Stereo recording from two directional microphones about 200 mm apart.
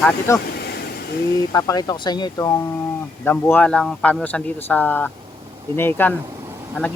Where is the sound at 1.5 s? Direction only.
20° left (ahead or behind).